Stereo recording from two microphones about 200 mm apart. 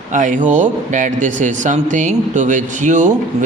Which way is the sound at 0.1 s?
40° right (ahead or behind).